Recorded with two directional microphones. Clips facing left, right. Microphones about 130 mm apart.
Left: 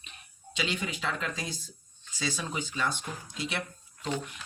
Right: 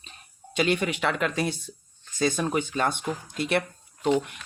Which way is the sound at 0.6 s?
60° right (ahead or behind).